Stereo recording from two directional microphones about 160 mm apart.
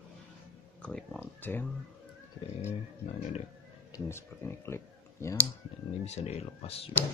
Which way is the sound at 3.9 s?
15° left (ahead or behind).